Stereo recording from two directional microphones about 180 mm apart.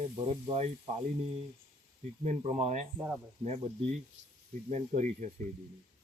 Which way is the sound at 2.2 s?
35° right (ahead or behind).